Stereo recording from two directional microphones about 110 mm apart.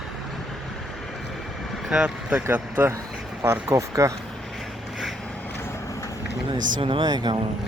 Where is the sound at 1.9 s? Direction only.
5° right (ahead or behind); by 4.1 s 30° right (ahead or behind).